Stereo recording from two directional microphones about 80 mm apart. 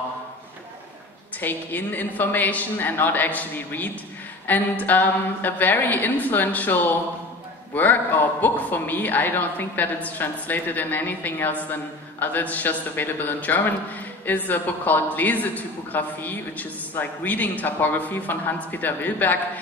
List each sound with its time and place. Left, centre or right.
1.4 s a woman's voice: left